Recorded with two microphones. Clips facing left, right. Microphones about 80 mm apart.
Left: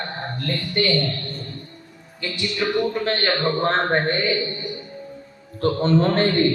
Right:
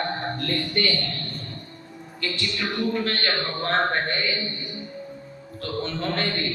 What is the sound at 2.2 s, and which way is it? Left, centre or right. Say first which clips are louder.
Speech: left 4 dB; centre.